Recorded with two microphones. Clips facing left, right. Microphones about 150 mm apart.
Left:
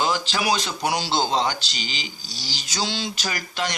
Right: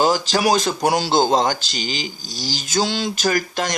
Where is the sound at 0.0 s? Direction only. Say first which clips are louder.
Right 6 dB; 40° right (ahead or behind).